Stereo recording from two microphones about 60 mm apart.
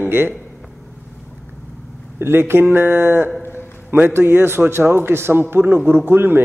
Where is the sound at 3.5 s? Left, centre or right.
Right.